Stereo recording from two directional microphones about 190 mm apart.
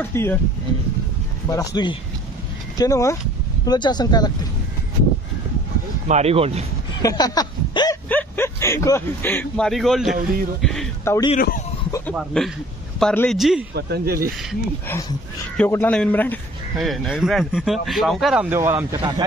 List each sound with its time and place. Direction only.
0.0 s speech: 10° left (ahead or behind)
1.5 s speech: 20° left (ahead or behind)
6.0 s speech: 35° right (ahead or behind)
7.0 s a sound: 20° left (ahead or behind)
8.1 s speech: 10° left (ahead or behind)
10.6 s a sound: centre (ahead or behind)
11.1 s speech: 20° left (ahead or behind)
11.3 s speech: 45° left (ahead or behind)
12.1 s speech: centre (ahead or behind)
13.7 s speech: 55° right (ahead or behind)
14.9 s speech: 15° left (ahead or behind); by 19.2 s 20° right (ahead or behind)